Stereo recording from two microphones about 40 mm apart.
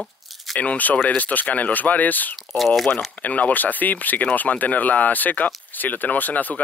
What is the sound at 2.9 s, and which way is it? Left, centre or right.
Speech, left.